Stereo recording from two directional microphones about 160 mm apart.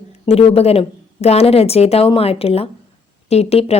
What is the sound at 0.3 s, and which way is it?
A woman's voice, 40° left (ahead or behind).